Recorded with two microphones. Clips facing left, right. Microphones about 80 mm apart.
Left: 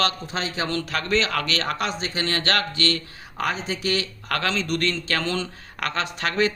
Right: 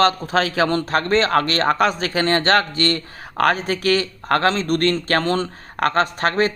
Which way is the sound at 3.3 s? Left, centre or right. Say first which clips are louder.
Right 8 dB; right.